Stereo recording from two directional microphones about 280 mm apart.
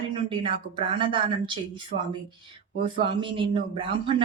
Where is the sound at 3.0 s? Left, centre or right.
Centre.